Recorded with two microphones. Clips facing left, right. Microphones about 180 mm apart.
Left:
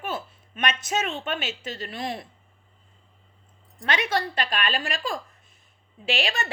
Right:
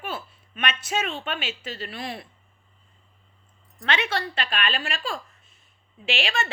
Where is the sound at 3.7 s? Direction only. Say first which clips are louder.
Left 1 dB; 40° left (ahead or behind).